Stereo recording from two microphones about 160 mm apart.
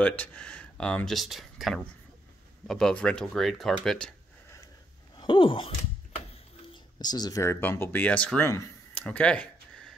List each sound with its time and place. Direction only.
0.0 s speech: 10° left (ahead or behind)
5.1 s a sound: 30° left (ahead or behind)
6.7 s speech: 25° left (ahead or behind); by 9.5 s 5° left (ahead or behind)